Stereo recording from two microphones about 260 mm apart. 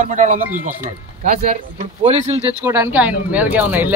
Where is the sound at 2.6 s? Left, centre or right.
Centre.